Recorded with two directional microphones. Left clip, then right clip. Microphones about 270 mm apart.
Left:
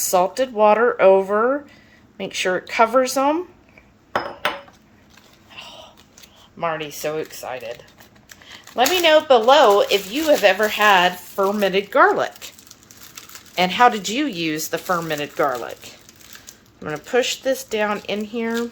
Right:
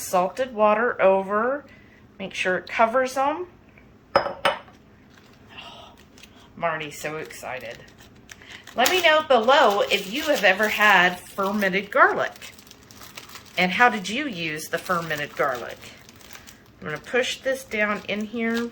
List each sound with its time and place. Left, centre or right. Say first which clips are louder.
0.1 s speech: left 4 dB; left
6.6 s speech: left 3 dB; left
8.7 s speech: left 3 dB; left
13.6 s speech: left 3 dB; left
16.8 s speech: left 4 dB; left